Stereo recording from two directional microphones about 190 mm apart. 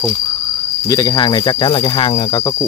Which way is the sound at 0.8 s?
20° left (ahead or behind).